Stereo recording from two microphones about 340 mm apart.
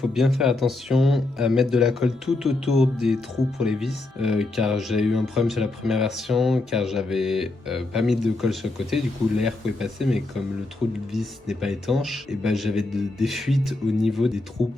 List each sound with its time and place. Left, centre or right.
0.1 s speech: centre
14.6 s a man's voice: centre